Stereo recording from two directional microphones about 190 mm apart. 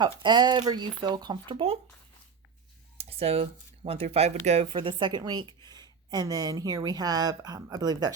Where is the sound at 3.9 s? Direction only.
30° right (ahead or behind).